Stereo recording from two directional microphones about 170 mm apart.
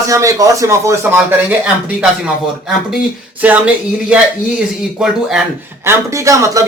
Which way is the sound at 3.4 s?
5° right (ahead or behind).